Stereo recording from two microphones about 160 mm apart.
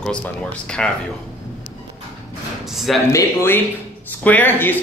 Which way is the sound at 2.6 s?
Centre (ahead or behind).